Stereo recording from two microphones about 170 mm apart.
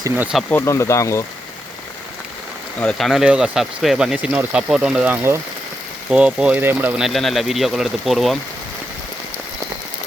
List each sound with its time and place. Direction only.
0.0 s speech: 5° right (ahead or behind)
0.5 s speech: 15° left (ahead or behind)
2.8 s speech: centre (ahead or behind)